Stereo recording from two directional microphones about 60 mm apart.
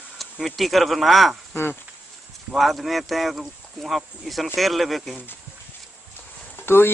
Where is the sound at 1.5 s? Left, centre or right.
Left.